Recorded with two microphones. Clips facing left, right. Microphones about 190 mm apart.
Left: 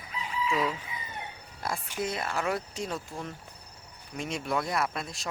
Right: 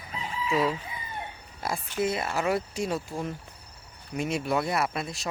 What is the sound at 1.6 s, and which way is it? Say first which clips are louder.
Speech: right 4 dB; 5° right (ahead or behind).